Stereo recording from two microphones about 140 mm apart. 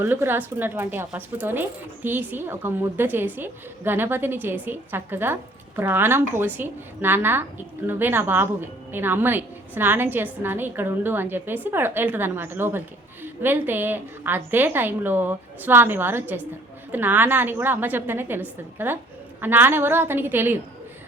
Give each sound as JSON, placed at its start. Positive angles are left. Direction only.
{"t": 0.0, "sound": "a woman's voice", "side_deg": -15}